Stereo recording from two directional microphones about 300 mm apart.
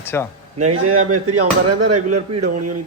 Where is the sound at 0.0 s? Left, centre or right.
Centre.